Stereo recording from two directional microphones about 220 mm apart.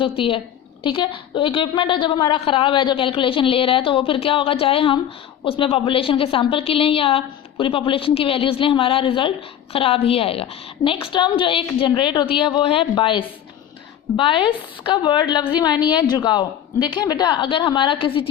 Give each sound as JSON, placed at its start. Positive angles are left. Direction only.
{"t": 0.2, "sound": "a woman's voice", "side_deg": 25}